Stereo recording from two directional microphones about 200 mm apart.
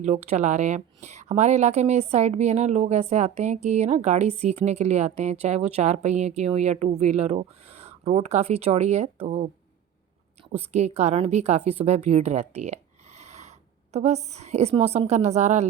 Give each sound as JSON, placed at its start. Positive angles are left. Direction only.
{"t": 0.0, "sound": "a woman's voice", "side_deg": -35}
{"t": 10.5, "sound": "a woman's voice", "side_deg": -30}